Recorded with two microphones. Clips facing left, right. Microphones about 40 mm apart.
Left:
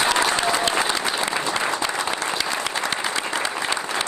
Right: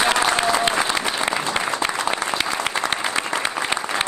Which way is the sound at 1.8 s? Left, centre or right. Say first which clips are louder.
Right 2 dB; right.